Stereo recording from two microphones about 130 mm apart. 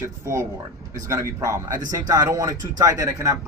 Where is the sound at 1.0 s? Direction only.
25° right (ahead or behind).